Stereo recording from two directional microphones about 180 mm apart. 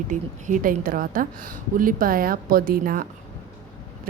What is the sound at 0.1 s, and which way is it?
A woman's voice, 45° right (ahead or behind).